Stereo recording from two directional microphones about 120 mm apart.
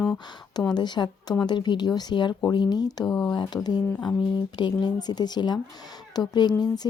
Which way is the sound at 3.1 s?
10° left (ahead or behind).